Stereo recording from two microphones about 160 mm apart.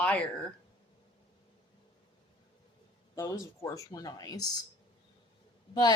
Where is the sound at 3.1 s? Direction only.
20° left (ahead or behind).